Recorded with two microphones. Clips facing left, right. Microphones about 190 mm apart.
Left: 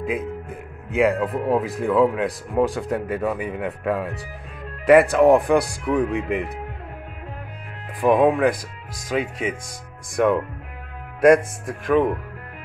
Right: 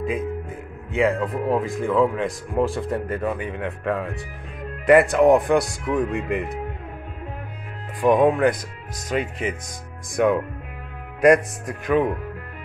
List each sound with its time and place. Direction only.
0.8 s speech: 5° left (ahead or behind)
8.0 s speech: centre (ahead or behind)